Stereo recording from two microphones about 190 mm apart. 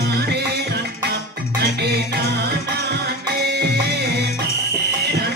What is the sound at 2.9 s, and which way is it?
Music, 60° right (ahead or behind).